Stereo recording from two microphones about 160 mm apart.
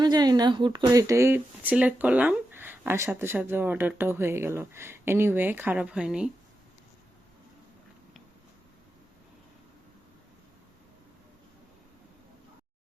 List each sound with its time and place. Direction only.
0.0 s speech: 25° right (ahead or behind); by 6.3 s 5° right (ahead or behind)